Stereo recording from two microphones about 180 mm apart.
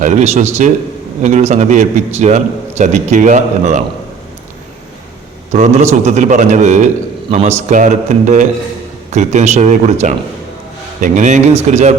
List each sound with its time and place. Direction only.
0.0 s a man's voice: 40° right (ahead or behind)
5.5 s a man's voice: 40° right (ahead or behind)